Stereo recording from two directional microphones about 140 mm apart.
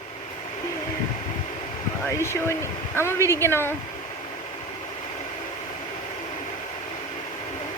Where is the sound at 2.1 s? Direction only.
20° left (ahead or behind).